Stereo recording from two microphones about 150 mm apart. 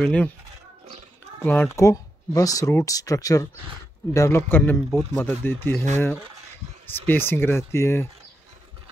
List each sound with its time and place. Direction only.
0.0 s speech: 10° left (ahead or behind)
1.4 s speech: 10° left (ahead or behind)
6.9 s speech: 15° left (ahead or behind)